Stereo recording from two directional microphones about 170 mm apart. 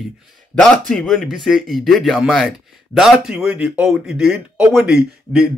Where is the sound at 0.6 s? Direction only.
5° left (ahead or behind).